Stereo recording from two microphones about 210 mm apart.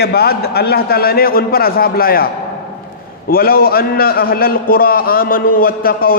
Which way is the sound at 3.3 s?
45° left (ahead or behind).